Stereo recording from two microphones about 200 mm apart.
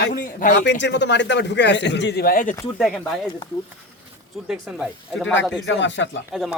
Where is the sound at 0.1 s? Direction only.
40° left (ahead or behind).